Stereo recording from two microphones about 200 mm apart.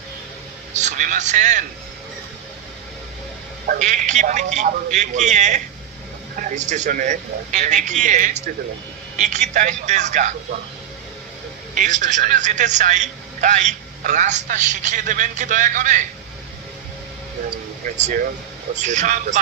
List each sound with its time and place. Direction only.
0.7 s a man's voice: 40° right (ahead or behind)
3.6 s a man's voice: 40° right (ahead or behind)
11.7 s a man's voice: 40° right (ahead or behind)
17.9 s a man's voice: 35° right (ahead or behind)